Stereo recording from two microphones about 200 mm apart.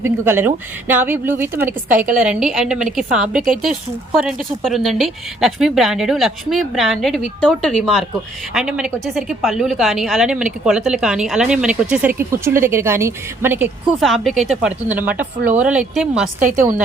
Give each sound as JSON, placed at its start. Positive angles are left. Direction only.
{"t": 0.0, "sound": "a woman's voice", "side_deg": -10}
{"t": 14.0, "sound": "a woman's voice", "side_deg": 0}
{"t": 16.4, "sound": "a woman's voice", "side_deg": -40}